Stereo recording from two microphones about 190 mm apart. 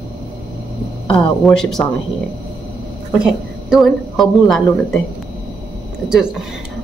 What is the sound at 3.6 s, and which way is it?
A woman's voice, centre (ahead or behind).